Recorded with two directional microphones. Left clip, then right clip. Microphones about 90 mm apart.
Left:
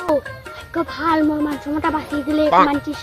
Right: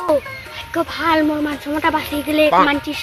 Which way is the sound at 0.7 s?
10° right (ahead or behind).